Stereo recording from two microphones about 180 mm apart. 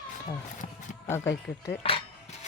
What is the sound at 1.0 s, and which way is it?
Speech, 15° left (ahead or behind).